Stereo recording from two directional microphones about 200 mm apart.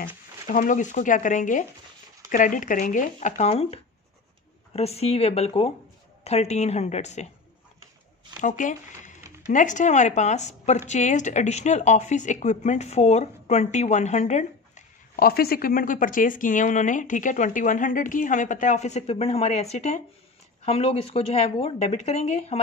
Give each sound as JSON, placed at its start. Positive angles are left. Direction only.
{"t": 0.5, "sound": "speech", "side_deg": 40}
{"t": 8.4, "sound": "speech", "side_deg": 40}